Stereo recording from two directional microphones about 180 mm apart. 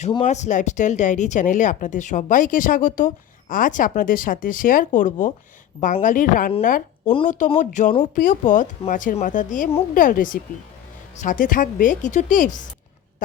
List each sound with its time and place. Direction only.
0.3 s speech: 40° left (ahead or behind)